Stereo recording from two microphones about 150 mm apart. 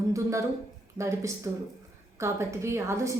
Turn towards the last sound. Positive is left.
turn(degrees=-20)  # may be behind; listen again after turning